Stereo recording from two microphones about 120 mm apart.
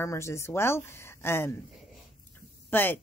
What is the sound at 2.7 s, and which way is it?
Speech, 15° left (ahead or behind).